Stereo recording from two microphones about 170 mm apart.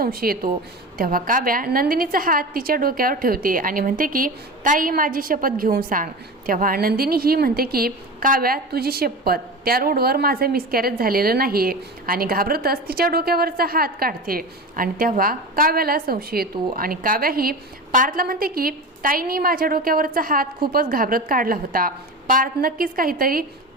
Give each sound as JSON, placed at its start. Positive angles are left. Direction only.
{"t": 0.0, "sound": "a woman's voice", "side_deg": -60}